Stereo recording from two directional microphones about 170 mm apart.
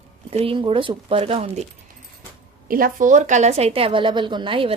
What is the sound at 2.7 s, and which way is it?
A woman's voice, 55° right (ahead or behind).